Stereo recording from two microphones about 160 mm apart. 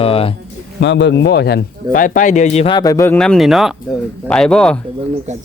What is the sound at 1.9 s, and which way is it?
Speech, 55° left (ahead or behind).